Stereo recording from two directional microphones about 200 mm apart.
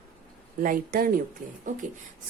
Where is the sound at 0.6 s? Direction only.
45° right (ahead or behind).